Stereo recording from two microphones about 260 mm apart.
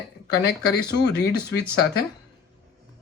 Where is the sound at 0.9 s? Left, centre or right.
Left.